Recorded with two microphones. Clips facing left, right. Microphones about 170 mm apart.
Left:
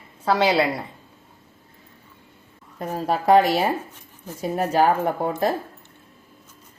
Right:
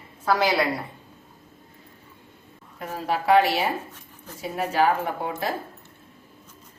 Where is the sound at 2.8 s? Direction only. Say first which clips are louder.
Left 4 dB; 40° left (ahead or behind).